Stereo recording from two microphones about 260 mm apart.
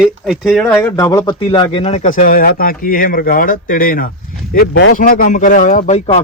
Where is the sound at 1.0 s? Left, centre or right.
Centre; by 4.1 s left.